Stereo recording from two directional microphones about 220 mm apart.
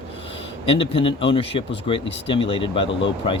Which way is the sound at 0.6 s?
25° left (ahead or behind).